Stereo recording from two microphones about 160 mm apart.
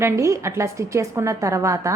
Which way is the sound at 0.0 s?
15° right (ahead or behind).